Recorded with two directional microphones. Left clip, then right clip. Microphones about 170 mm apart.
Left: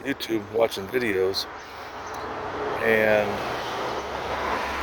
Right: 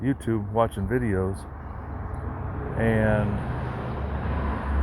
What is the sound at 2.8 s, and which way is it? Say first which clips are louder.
Speech: left 4 dB; 60° left (ahead or behind).